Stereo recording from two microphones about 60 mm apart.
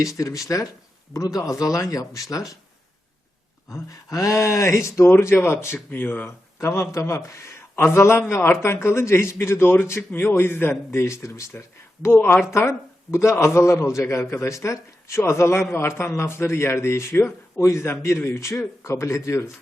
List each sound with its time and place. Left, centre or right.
0.0 s speech: left
3.8 s speech: left
5.4 s speech: left
6.2 s a man's voice: left
12.0 s speech: left
12.5 s a man's voice: left